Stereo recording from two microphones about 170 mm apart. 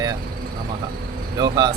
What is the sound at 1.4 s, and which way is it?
Speech, 25° right (ahead or behind).